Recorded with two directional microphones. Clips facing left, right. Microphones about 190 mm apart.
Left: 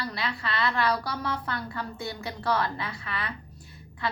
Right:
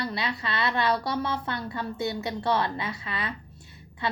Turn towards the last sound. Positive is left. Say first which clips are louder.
# right 1 dB
turn(degrees=-20)  # may be behind; listen again after turning